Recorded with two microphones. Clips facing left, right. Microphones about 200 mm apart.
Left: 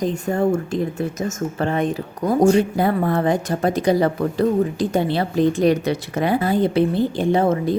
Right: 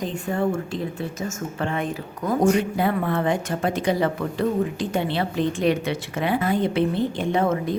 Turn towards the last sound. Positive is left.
turn(degrees=30)  # may be behind; listen again after turning